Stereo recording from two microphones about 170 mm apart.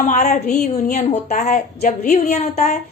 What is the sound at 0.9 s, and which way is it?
Speech, 40° left (ahead or behind).